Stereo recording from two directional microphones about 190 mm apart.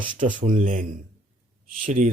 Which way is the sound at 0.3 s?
45° right (ahead or behind).